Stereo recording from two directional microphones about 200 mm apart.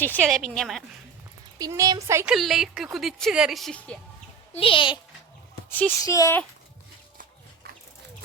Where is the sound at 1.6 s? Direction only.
15° right (ahead or behind).